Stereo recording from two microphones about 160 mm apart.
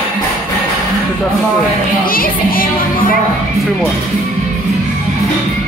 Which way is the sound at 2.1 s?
65° left (ahead or behind).